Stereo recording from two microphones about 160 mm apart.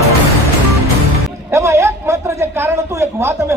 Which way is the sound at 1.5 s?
20° right (ahead or behind).